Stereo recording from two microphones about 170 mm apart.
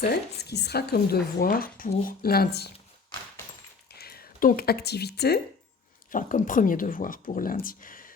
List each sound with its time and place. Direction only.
0.0 s speech: 70° left (ahead or behind)
3.9 s speech: 65° left (ahead or behind)
6.1 s speech: 50° left (ahead or behind)